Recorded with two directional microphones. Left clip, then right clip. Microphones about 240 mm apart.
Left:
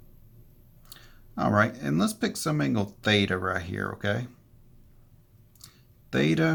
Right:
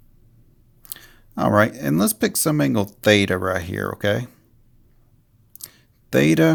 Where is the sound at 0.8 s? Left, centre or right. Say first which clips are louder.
Right 8 dB; right.